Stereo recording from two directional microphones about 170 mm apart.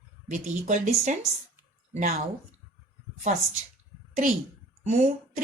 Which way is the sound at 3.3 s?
45° right (ahead or behind).